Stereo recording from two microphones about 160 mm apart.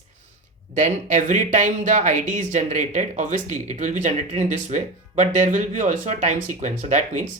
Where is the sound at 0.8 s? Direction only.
50° right (ahead or behind).